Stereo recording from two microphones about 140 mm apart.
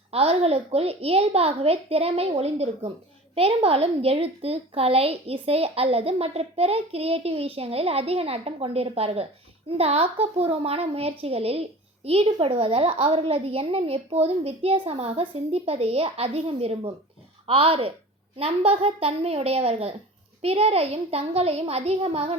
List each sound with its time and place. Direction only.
0.1 s a woman's voice: 45° right (ahead or behind)